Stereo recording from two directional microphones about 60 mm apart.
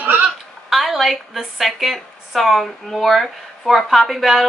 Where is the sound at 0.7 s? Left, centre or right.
Centre.